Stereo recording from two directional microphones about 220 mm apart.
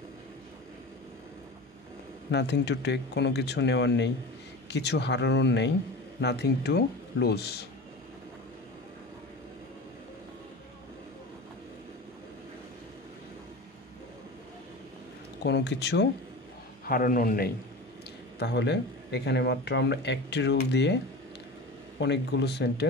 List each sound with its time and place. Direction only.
2.3 s speech: 50° left (ahead or behind)
15.4 s speech: 50° left (ahead or behind)
16.8 s a man's voice: 40° left (ahead or behind)
18.4 s speech: 50° left (ahead or behind)